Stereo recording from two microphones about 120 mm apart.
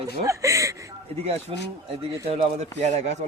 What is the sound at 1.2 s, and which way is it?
Speech, 60° right (ahead or behind).